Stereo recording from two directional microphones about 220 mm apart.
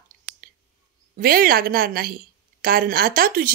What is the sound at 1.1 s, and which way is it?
A woman's voice, 40° right (ahead or behind).